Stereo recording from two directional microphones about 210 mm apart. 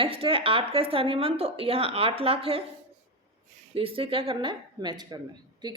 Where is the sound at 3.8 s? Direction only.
25° right (ahead or behind).